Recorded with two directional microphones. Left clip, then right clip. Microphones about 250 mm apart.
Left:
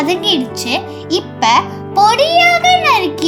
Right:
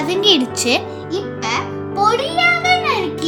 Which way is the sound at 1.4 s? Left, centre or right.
Centre.